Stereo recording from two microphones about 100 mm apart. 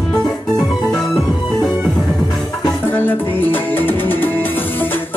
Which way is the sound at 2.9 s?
20° left (ahead or behind).